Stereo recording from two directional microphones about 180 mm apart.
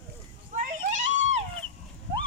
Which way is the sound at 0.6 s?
45° right (ahead or behind).